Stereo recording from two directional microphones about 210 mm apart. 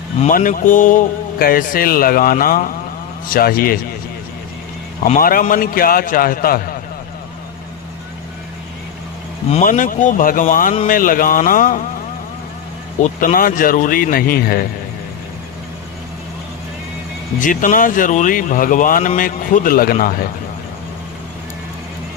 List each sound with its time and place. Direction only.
0.2 s a man's voice: 40° left (ahead or behind)
5.0 s a man's voice: 40° left (ahead or behind)
9.5 s speech: 35° left (ahead or behind)
13.0 s a man's voice: 40° left (ahead or behind)
17.4 s speech: 40° left (ahead or behind)